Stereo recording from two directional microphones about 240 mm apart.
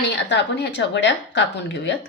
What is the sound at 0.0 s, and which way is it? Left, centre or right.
A woman's voice, left.